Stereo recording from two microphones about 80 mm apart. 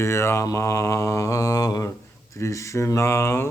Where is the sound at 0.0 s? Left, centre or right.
Left.